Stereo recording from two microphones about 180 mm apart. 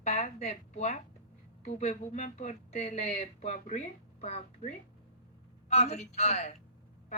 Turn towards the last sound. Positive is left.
turn(degrees=35)  # may be behind; listen again after turning